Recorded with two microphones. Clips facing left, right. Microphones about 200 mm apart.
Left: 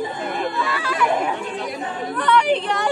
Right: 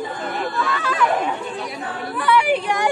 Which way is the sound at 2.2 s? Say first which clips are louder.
Even; 10° right (ahead or behind).